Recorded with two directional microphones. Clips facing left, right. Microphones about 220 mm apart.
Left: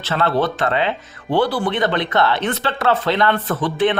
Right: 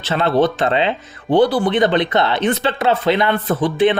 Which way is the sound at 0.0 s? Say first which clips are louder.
Right 3 dB; 20° right (ahead or behind).